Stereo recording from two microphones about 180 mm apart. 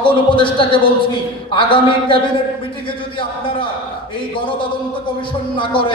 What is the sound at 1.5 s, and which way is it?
Speech, 25° left (ahead or behind).